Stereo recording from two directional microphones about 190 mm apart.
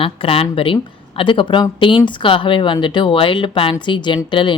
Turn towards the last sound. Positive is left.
turn(degrees=25)  # may be behind; listen again after turning